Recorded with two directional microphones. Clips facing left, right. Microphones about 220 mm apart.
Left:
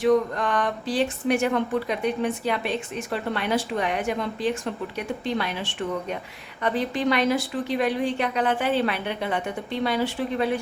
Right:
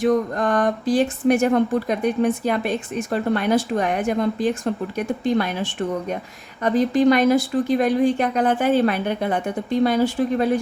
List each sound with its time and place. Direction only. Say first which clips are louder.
0.0 s speech: right 2 dB; 45° right (ahead or behind)